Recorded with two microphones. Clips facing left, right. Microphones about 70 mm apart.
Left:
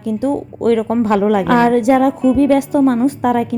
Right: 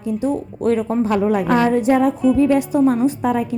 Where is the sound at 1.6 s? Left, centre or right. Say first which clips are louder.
Left 4 dB; left.